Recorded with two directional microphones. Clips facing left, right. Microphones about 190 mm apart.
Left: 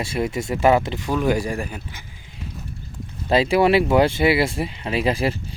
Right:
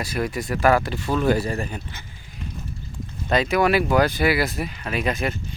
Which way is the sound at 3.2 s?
30° left (ahead or behind).